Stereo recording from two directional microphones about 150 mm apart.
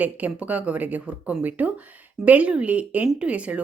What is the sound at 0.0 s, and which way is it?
A woman's voice, 10° right (ahead or behind).